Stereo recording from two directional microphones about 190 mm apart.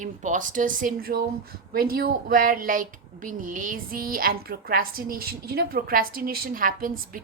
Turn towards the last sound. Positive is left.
turn(degrees=-45)  # may be behind; listen again after turning